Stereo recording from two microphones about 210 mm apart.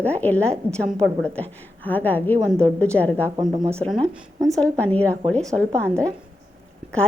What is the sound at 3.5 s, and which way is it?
Speech, 15° right (ahead or behind).